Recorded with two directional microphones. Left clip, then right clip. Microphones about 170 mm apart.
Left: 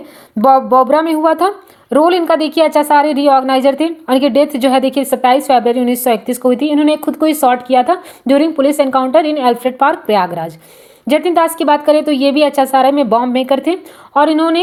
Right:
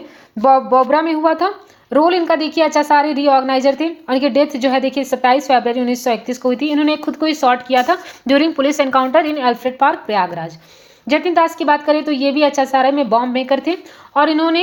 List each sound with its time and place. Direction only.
0.4 s a woman's voice: 30° left (ahead or behind)